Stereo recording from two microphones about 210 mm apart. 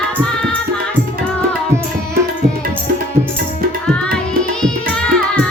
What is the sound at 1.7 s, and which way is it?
Tabla, 10° right (ahead or behind).